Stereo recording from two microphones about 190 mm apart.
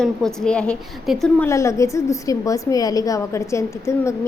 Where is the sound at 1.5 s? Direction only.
15° left (ahead or behind).